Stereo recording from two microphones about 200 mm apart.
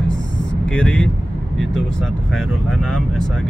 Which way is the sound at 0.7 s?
5° left (ahead or behind).